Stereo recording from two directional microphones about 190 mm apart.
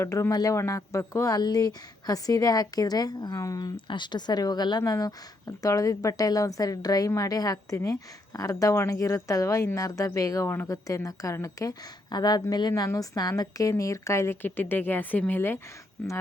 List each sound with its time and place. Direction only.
0.0 s speech: 15° left (ahead or behind)